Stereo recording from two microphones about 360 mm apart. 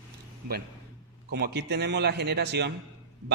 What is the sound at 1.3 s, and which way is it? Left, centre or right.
A man's voice, right.